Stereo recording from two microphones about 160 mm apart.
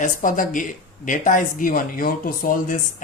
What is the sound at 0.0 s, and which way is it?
Speech, 55° left (ahead or behind).